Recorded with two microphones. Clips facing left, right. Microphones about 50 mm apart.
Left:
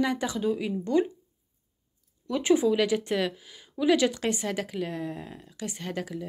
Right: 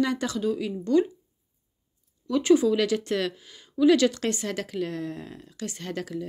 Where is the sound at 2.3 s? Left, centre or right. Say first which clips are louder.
Right 3 dB; centre.